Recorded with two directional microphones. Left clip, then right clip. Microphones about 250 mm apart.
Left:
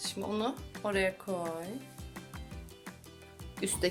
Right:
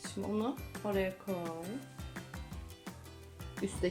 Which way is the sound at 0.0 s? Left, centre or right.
Left.